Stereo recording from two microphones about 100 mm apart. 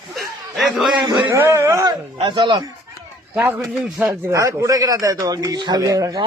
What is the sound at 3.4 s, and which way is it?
Speech, 15° right (ahead or behind).